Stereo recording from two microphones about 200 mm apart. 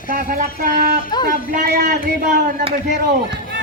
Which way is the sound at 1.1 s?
20° left (ahead or behind).